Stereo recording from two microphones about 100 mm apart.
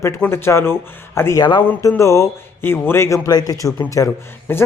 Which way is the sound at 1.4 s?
50° left (ahead or behind).